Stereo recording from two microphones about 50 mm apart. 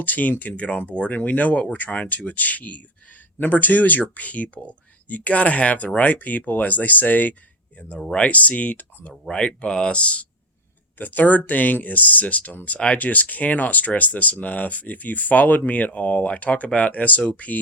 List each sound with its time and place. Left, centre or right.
0.0 s speech: left
9.6 s speech: centre
10.9 s speech: left